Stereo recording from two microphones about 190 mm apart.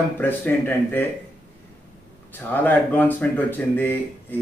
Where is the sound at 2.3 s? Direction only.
10° left (ahead or behind).